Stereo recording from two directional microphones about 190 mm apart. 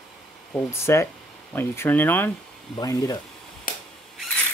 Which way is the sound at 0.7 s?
15° left (ahead or behind).